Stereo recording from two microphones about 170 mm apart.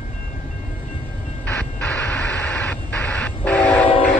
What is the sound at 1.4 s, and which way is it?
Vehicle, 10° left (ahead or behind).